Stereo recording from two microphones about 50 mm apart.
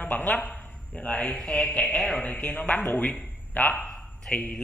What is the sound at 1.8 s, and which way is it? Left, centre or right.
Speech, centre.